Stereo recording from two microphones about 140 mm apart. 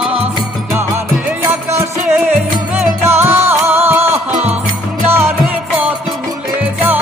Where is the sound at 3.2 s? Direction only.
15° right (ahead or behind).